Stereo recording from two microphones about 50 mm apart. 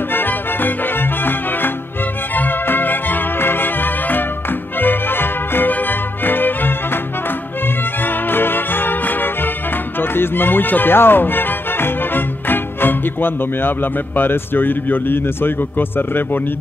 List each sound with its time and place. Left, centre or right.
0.1 s music: left
2.3 s music: left
8.0 s music: left
9.9 s speech: left